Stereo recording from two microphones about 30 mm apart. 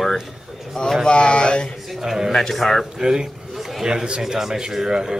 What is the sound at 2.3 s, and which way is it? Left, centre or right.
Speech, centre.